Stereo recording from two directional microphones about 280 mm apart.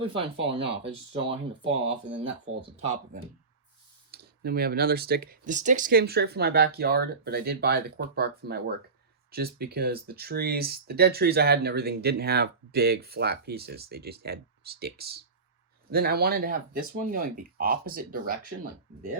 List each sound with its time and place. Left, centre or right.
0.0 s speech: centre